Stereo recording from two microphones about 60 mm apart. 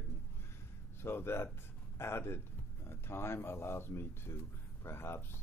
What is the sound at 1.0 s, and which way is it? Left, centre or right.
Speech, left.